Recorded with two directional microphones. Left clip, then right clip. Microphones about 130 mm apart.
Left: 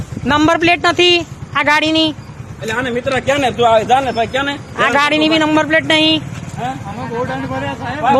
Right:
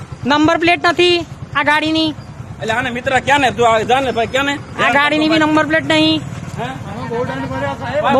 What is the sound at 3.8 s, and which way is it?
Speech, 50° right (ahead or behind).